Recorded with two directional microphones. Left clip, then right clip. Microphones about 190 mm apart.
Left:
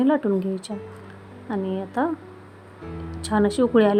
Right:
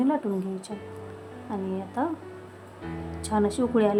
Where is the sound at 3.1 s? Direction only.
20° left (ahead or behind).